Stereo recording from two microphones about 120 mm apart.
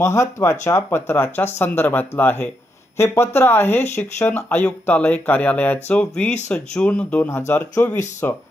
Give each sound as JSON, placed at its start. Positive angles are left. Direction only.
{"t": 0.0, "sound": "speech", "side_deg": 25}